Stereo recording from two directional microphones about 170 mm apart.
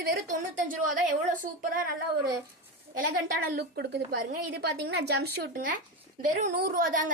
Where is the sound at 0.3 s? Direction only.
50° right (ahead or behind).